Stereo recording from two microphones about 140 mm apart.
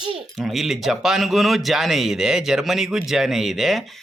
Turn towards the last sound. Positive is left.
turn(degrees=0)  # may be behind; listen again after turning